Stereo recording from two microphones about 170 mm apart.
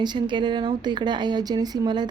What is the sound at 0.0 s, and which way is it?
Speech, 25° right (ahead or behind).